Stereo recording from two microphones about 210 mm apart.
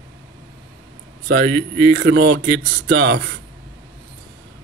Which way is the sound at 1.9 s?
50° right (ahead or behind).